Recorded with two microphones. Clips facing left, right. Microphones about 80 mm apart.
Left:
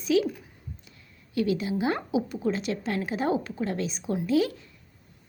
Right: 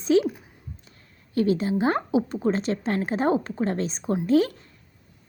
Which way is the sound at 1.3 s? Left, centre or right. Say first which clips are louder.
Right 4 dB; right.